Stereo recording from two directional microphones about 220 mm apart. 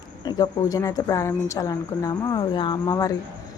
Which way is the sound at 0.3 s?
20° left (ahead or behind).